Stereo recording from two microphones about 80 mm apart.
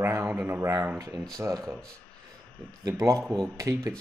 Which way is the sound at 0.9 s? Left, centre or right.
Right.